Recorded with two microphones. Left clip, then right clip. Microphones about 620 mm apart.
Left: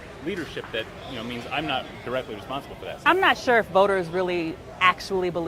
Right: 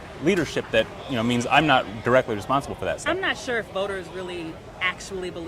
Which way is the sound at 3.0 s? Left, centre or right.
Left.